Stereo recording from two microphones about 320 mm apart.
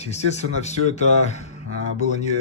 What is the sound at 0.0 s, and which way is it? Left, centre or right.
Speech, left.